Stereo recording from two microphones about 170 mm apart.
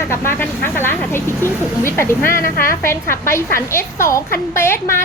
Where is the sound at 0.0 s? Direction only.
15° left (ahead or behind).